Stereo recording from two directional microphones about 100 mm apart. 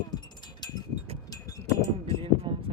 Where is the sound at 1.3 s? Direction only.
35° left (ahead or behind).